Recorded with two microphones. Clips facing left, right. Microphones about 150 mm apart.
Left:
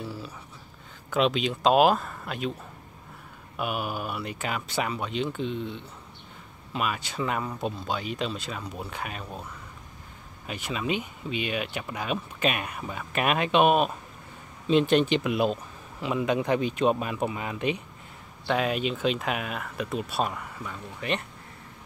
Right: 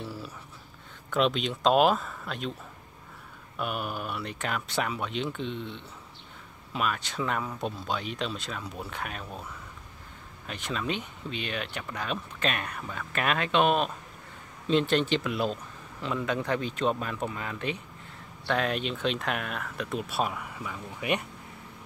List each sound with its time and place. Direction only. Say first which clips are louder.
0.0 s a sound: left 2 dB; centre (ahead or behind)
1.1 s speech: left 2 dB; centre (ahead or behind)
3.5 s speech: left 2 dB; 5° left (ahead or behind)